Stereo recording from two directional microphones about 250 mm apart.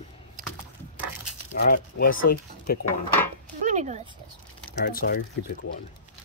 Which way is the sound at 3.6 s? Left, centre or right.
Right.